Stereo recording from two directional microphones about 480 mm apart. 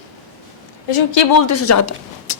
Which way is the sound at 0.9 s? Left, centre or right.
Left.